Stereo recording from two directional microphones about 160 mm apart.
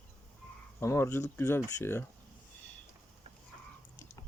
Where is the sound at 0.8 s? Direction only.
15° left (ahead or behind).